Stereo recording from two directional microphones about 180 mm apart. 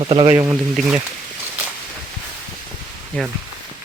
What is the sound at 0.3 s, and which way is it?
Speech, 10° right (ahead or behind).